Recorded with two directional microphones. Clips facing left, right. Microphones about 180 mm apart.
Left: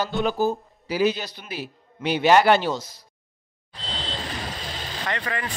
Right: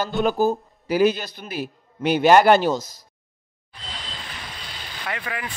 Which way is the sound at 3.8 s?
30° left (ahead or behind).